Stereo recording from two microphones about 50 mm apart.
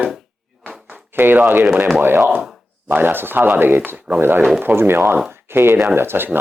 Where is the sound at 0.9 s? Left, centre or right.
Right.